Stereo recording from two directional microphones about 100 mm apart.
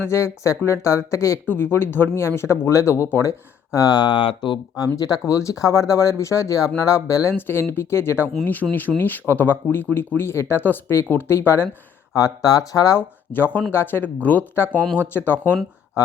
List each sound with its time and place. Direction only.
0.0 s speech: 30° left (ahead or behind)
1.5 s speech: 20° left (ahead or behind); by 4.6 s 55° left (ahead or behind)
4.9 s speech: 35° left (ahead or behind)
8.6 s speech: 10° right (ahead or behind)
9.0 s speech: 20° left (ahead or behind)
12.1 s speech: 35° left (ahead or behind)
13.0 s speech: 20° left (ahead or behind)